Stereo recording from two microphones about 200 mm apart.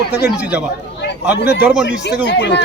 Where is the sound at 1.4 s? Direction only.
55° left (ahead or behind).